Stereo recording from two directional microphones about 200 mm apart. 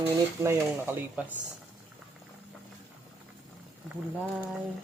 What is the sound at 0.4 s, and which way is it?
Speech, 10° right (ahead or behind).